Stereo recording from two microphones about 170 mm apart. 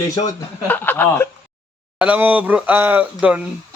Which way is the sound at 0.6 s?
10° left (ahead or behind).